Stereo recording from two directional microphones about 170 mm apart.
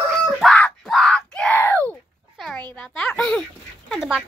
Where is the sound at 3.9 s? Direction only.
5° right (ahead or behind).